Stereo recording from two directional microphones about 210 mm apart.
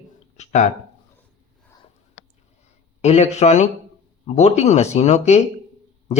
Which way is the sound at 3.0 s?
30° left (ahead or behind).